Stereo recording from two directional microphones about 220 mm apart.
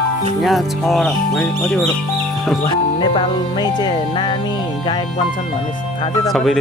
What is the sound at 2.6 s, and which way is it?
Speech, 20° left (ahead or behind).